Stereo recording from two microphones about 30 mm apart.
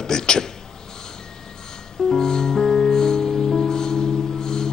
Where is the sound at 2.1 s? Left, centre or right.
Centre.